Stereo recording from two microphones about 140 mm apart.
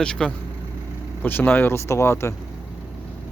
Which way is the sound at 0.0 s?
5° left (ahead or behind).